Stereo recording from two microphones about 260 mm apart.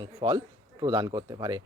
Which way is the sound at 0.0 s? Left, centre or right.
Centre.